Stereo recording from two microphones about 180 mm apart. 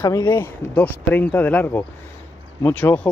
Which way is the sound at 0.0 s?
20° left (ahead or behind).